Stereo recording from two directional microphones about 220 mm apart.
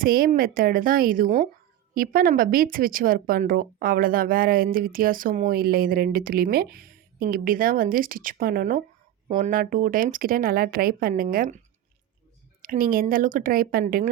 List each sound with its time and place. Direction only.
0.0 s speech: 40° right (ahead or behind)
12.6 s speech: 40° right (ahead or behind)